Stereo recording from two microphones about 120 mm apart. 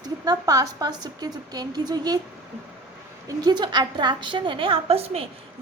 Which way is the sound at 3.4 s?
35° right (ahead or behind).